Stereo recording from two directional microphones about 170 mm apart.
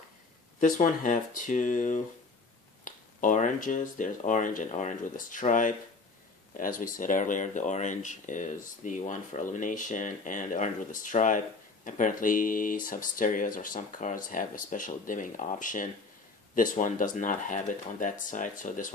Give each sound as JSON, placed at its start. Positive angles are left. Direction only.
{"t": 0.6, "sound": "speech", "side_deg": 50}